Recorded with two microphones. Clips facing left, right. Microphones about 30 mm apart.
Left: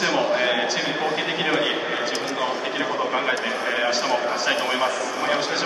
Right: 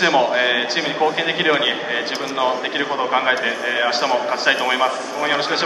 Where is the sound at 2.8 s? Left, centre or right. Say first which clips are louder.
Right 4 dB; right.